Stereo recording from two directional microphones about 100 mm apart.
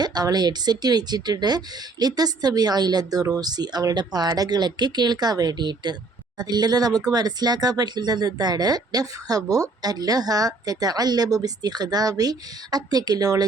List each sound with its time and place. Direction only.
0.0 s speech: 40° right (ahead or behind)